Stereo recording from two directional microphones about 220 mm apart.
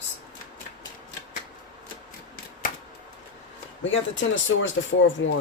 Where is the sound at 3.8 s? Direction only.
60° left (ahead or behind).